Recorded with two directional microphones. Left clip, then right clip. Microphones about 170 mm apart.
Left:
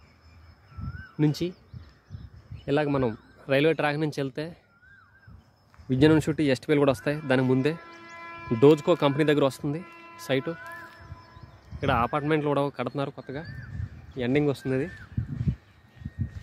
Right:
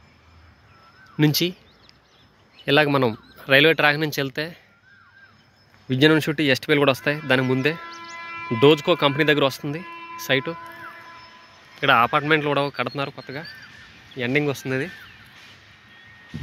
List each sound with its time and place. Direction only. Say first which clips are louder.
1.1 s speech: right 7 dB; 10° right (ahead or behind)
2.6 s speech: right 7 dB; 5° right (ahead or behind)
5.9 s speech: right 4 dB; 10° left (ahead or behind)
7.8 s music: right 7 dB; 70° left (ahead or behind); by 8.5 s 85° left
8.5 s speech: right 3 dB; 15° left (ahead or behind)
11.8 s speech: right 8 dB; centre (ahead or behind); by 14.9 s 20° left (ahead or behind)